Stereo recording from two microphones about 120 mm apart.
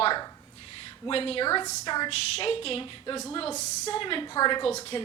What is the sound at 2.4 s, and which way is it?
Speech, 50° left (ahead or behind).